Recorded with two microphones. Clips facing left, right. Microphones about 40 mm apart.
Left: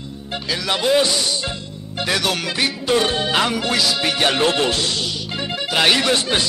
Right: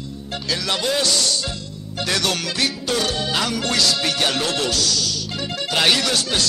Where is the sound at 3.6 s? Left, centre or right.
Centre.